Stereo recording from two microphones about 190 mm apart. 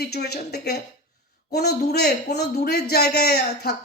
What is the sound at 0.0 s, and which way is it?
Speech, 55° left (ahead or behind).